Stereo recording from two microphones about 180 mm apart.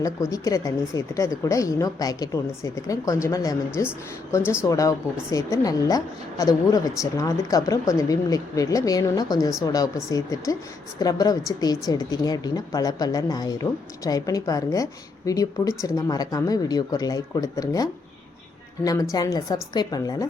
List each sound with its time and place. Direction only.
0.0 s speech: 20° left (ahead or behind)
19.1 s speech: 20° left (ahead or behind)